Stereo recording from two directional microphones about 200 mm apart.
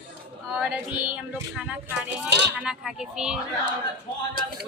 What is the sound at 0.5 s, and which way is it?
A woman's voice, 5° right (ahead or behind).